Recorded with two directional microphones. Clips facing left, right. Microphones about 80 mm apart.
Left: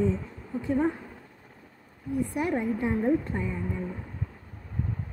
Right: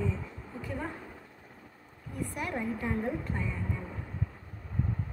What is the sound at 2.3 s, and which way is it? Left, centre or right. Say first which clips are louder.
A woman's voice: left 5 dB; left.